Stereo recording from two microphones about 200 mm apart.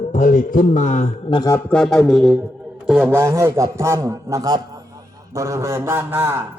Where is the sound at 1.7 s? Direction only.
Centre (ahead or behind).